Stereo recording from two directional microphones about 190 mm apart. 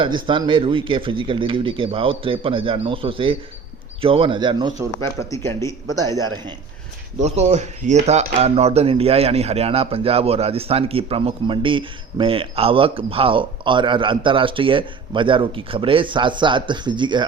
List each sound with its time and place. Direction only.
0.0 s speech: 25° right (ahead or behind)
5.3 s a man's voice: 15° left (ahead or behind)
7.2 s speech: 35° right (ahead or behind)